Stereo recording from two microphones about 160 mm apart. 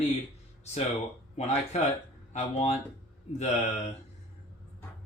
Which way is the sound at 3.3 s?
45° left (ahead or behind).